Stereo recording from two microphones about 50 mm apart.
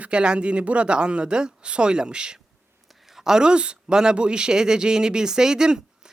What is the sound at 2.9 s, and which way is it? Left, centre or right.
Speech, centre.